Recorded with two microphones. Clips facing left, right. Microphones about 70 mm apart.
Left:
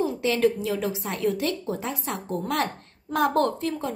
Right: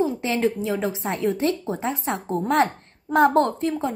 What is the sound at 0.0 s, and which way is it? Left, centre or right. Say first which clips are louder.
A woman's voice: even; right.